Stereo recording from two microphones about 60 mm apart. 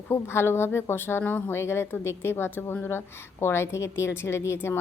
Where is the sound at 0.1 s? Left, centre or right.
Left.